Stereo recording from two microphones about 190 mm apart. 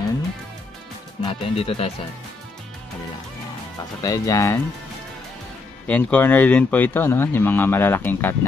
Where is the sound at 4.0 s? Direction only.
20° left (ahead or behind).